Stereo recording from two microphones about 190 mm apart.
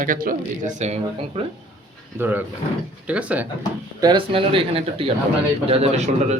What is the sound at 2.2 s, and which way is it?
Speech, 10° right (ahead or behind).